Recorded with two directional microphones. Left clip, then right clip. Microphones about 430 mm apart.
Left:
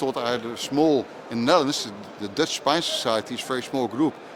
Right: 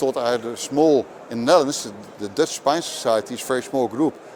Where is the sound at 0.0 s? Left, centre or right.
Right.